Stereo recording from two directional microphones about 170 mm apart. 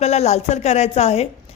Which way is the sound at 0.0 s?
40° left (ahead or behind).